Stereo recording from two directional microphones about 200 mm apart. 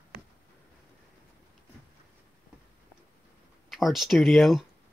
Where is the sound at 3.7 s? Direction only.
Centre (ahead or behind).